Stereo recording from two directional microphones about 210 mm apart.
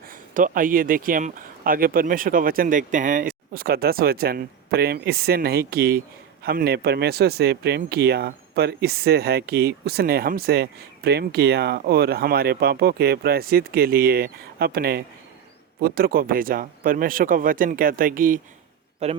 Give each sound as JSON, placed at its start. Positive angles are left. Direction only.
{"t": 0.0, "sound": "speech", "side_deg": -40}
{"t": 19.0, "sound": "speech", "side_deg": -30}